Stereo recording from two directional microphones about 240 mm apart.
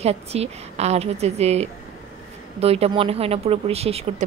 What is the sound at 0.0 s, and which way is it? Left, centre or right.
A woman's voice, right.